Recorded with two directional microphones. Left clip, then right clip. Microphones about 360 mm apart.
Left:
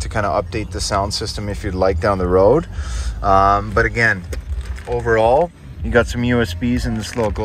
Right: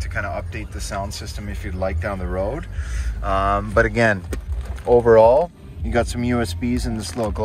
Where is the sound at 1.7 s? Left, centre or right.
Left.